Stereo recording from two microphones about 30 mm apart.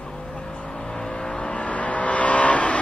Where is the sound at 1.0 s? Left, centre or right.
Left.